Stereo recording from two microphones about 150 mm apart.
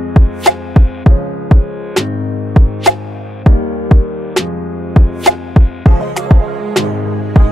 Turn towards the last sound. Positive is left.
turn(degrees=0)  # may be behind; listen again after turning